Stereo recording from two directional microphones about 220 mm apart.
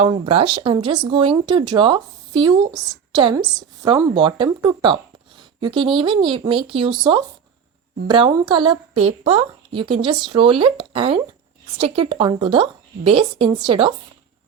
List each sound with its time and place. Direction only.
0.1 s speech: 25° right (ahead or behind)